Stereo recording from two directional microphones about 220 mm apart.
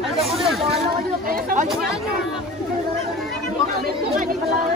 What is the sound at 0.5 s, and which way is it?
Hubbub, centre (ahead or behind).